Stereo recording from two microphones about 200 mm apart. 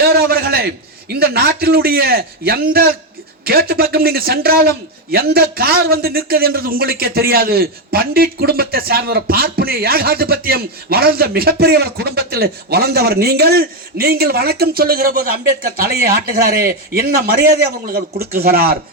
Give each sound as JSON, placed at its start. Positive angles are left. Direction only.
{"t": 0.0, "sound": "a man's voice", "side_deg": -50}